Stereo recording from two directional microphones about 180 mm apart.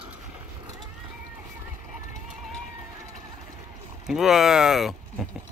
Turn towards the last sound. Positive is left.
turn(degrees=0)  # may be behind; listen again after turning